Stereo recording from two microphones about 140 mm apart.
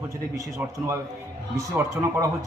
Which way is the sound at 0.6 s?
10° right (ahead or behind).